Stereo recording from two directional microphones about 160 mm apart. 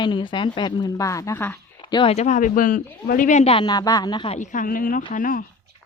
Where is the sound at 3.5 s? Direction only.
25° left (ahead or behind).